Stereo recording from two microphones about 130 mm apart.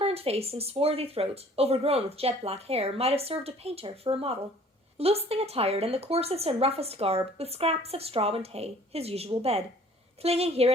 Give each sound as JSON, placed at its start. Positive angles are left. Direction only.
{"t": 0.0, "sound": "speech", "side_deg": -50}